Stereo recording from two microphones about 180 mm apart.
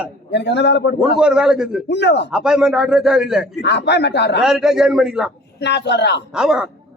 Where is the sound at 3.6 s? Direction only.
70° left (ahead or behind).